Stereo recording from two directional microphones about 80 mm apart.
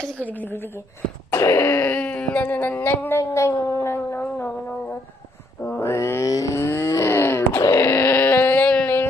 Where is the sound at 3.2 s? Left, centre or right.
Left.